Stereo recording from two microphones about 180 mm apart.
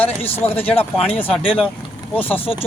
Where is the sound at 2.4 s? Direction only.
30° left (ahead or behind).